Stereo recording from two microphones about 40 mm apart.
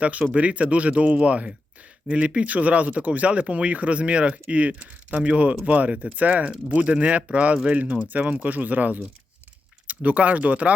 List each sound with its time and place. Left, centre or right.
0.0 s speech: right